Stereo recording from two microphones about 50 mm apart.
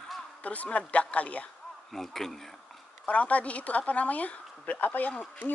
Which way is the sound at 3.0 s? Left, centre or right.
Left.